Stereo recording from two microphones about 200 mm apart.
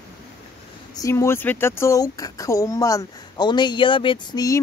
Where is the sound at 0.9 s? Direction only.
15° left (ahead or behind).